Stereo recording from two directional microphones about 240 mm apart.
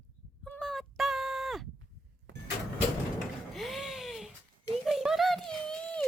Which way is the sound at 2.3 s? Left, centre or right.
Right.